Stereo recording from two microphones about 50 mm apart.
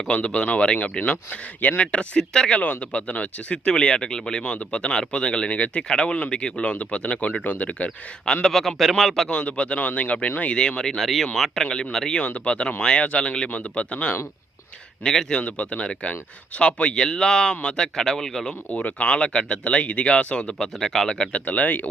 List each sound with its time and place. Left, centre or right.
0.1 s speech: left
2.5 s speech: left
8.2 s a man's voice: centre
9.3 s speech: left
11.0 s a man's voice: centre
12.2 s speech: left
15.0 s speech: centre
15.4 s speech: left; by 18.5 s centre
18.7 s speech: left
21.4 s speech: left